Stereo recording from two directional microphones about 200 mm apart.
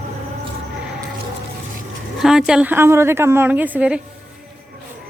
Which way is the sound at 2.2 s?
5° right (ahead or behind).